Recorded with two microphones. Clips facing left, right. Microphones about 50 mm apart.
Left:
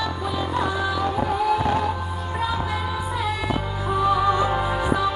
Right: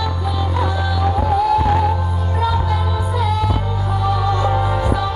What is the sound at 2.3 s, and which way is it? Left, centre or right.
Music, centre.